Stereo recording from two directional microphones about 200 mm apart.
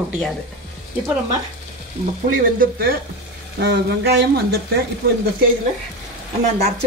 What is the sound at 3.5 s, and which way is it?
Frying, 55° right (ahead or behind).